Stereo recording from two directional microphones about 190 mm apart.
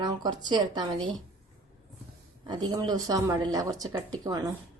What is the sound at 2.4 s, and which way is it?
Speech, 20° right (ahead or behind).